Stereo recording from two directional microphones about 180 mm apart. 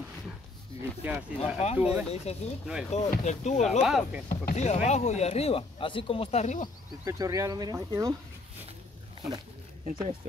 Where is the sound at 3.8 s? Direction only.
Centre (ahead or behind).